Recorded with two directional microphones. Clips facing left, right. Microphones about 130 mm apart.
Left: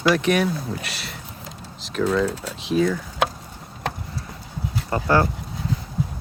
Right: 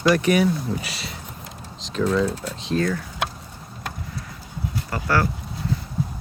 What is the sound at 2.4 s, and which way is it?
Speech, 10° left (ahead or behind).